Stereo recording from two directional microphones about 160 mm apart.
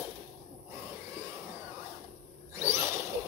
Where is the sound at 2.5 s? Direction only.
15° right (ahead or behind).